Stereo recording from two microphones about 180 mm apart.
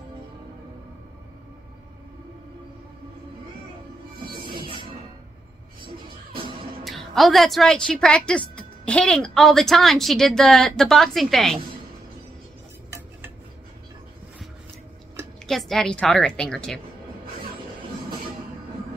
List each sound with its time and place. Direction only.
4.6 s music: 30° right (ahead or behind)
6.8 s a woman's voice: centre (ahead or behind)
15.4 s a woman's voice: centre (ahead or behind)